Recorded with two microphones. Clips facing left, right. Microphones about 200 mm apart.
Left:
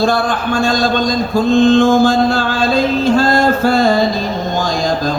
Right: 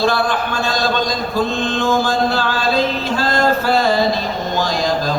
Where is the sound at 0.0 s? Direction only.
50° left (ahead or behind).